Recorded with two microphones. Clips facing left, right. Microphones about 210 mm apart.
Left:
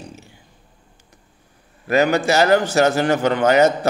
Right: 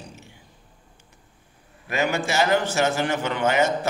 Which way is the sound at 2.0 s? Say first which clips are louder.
Left 7 dB; 40° left (ahead or behind).